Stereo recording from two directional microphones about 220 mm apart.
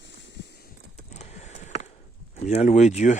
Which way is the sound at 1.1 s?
30° left (ahead or behind).